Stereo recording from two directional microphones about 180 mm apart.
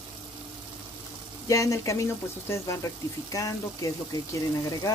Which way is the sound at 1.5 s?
15° left (ahead or behind).